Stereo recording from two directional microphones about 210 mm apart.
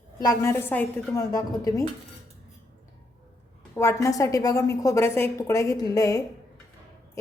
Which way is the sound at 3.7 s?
10° left (ahead or behind).